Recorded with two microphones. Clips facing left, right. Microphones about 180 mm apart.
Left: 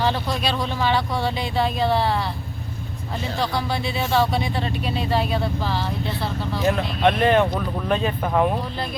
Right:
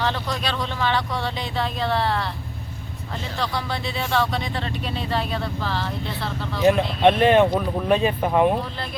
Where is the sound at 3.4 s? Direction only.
5° left (ahead or behind).